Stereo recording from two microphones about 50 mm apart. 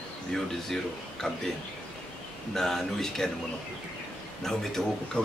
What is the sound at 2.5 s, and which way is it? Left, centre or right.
Speech, centre.